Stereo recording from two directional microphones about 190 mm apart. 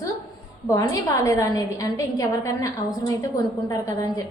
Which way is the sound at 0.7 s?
15° left (ahead or behind).